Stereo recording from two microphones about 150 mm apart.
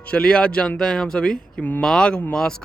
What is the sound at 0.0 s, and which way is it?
A man's voice, 5° left (ahead or behind).